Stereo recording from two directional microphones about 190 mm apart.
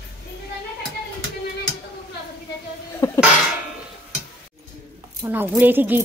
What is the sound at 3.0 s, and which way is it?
Cough, 15° left (ahead or behind).